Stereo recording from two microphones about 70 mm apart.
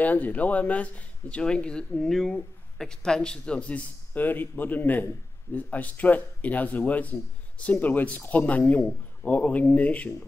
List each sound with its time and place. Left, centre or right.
0.0 s speech: left